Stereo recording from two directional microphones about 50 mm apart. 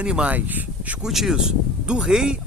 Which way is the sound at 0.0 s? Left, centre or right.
Right.